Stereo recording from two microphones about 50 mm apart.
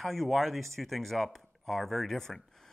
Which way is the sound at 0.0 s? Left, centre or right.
Centre.